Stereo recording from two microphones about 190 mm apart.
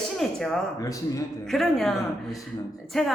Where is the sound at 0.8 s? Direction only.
20° left (ahead or behind).